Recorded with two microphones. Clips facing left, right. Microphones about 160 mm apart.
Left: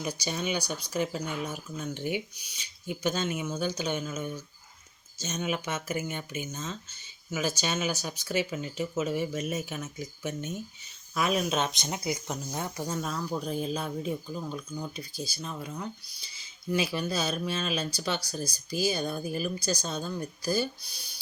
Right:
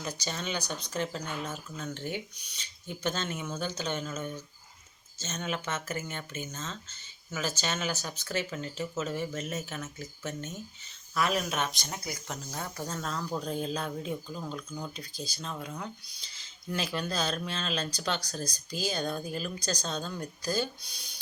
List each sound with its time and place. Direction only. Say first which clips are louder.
0.0 s speech: left 4 dB; 15° left (ahead or behind)